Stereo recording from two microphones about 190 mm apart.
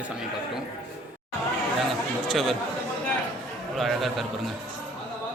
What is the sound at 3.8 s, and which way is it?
Speech, centre (ahead or behind).